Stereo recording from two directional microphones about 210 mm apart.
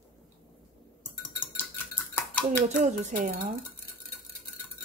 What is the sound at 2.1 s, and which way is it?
Dishes, 5° left (ahead or behind).